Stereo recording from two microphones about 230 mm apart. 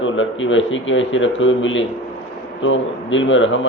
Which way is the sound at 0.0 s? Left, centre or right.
Left.